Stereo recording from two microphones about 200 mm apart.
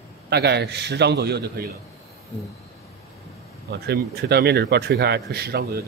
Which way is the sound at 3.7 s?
55° right (ahead or behind).